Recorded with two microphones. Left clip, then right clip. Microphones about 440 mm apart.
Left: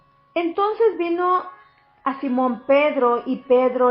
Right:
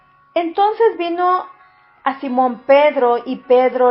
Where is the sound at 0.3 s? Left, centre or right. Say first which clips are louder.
Right 5 dB; centre.